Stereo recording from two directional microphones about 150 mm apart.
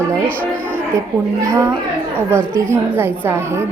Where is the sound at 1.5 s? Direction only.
20° right (ahead or behind).